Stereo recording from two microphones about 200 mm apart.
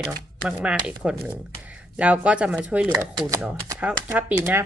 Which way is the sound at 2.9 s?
15° right (ahead or behind).